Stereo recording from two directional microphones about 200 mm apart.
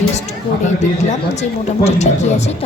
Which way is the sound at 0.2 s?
35° left (ahead or behind).